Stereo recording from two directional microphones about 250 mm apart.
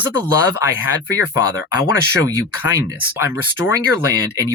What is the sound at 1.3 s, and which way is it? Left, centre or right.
Speech, centre.